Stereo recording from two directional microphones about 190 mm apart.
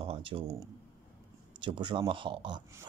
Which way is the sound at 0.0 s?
30° right (ahead or behind).